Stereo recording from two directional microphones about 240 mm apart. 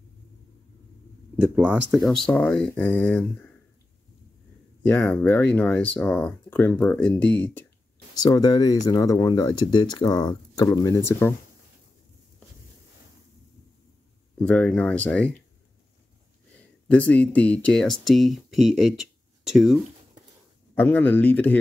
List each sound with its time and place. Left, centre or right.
1.3 s speech: centre
4.8 s speech: centre
14.4 s speech: centre
17.1 s speech: centre